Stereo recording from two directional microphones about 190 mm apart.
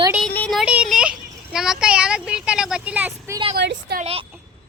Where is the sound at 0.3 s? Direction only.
Centre (ahead or behind).